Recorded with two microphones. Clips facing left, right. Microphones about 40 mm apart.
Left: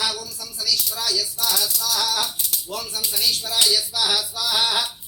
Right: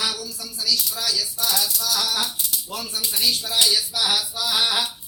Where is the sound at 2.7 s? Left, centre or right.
Right.